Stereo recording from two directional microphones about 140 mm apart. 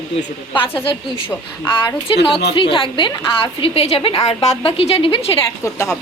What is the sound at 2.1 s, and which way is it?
A woman's voice, 40° left (ahead or behind).